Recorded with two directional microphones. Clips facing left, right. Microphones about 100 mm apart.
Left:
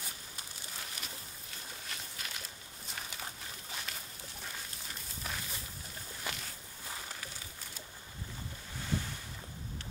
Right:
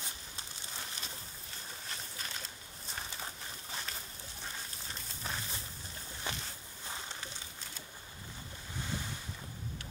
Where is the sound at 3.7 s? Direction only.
35° right (ahead or behind).